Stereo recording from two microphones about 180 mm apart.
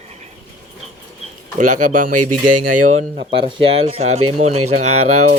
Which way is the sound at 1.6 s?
45° right (ahead or behind).